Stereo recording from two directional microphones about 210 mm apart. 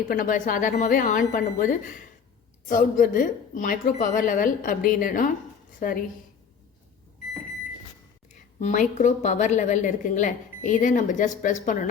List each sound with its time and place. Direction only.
0.1 s a woman's voice: 40° left (ahead or behind)
8.5 s a woman's voice: 35° left (ahead or behind)